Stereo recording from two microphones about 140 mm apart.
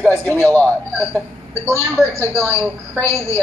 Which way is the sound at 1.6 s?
20° left (ahead or behind).